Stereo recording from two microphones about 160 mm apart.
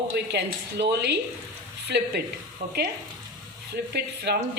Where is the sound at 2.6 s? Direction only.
60° right (ahead or behind).